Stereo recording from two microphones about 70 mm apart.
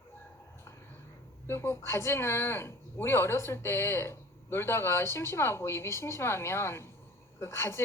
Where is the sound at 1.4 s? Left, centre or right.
Left.